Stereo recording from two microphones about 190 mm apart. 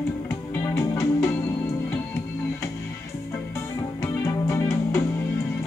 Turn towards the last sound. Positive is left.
turn(degrees=15)  # may be behind; listen again after turning